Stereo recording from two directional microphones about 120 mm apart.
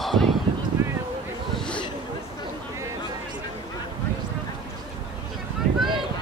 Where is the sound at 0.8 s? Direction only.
25° right (ahead or behind).